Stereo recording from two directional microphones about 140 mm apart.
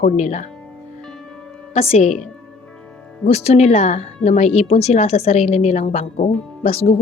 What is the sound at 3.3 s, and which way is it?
A woman's voice, 50° left (ahead or behind).